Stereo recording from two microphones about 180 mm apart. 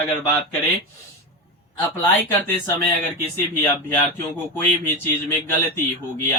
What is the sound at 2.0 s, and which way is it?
Speech, 15° left (ahead or behind).